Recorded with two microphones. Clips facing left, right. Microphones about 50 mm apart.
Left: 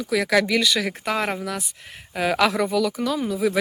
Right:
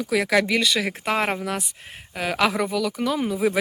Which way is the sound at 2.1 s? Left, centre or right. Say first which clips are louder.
Left 2 dB; centre.